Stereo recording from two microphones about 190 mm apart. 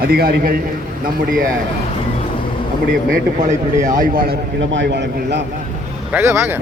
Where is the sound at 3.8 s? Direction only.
45° right (ahead or behind); by 5.4 s 65° right (ahead or behind).